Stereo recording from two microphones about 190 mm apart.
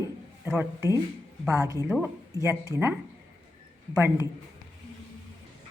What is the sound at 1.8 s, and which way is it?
Speech, centre (ahead or behind).